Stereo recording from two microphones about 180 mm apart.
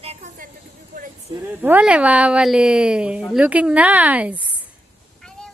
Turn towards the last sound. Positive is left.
turn(degrees=5)  # may be behind; listen again after turning